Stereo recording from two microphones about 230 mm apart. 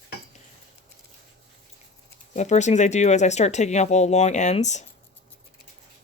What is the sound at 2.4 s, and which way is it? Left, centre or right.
Speech, left.